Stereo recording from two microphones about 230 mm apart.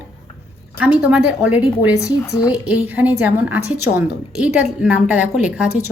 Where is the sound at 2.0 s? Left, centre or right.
Centre.